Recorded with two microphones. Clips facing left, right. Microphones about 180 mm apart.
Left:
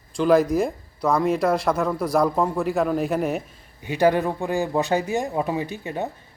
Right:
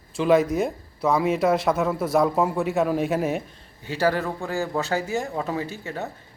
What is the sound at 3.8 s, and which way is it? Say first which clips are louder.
Speech: left 4 dB; 15° left (ahead or behind).